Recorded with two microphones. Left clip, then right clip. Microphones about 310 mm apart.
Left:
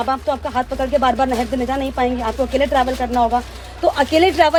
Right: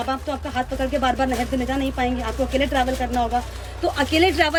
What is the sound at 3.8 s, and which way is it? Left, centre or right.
Speech, centre.